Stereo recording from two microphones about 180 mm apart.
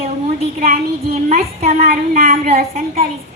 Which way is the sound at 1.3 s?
40° right (ahead or behind).